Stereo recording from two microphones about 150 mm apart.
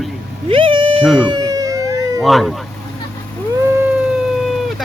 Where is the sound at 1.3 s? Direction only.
25° right (ahead or behind).